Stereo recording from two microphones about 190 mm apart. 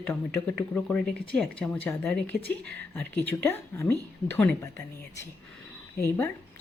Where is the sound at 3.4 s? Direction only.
10° left (ahead or behind).